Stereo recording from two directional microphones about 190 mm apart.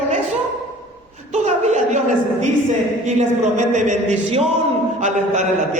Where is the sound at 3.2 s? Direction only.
40° right (ahead or behind).